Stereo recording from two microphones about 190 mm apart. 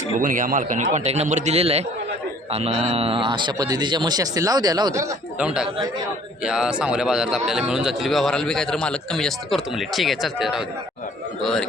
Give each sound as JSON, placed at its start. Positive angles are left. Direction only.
{"t": 0.2, "sound": "a man's voice", "side_deg": -45}
{"t": 5.4, "sound": "speech", "side_deg": -5}